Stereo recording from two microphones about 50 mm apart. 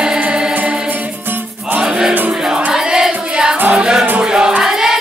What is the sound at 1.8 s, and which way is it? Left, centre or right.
Music, centre.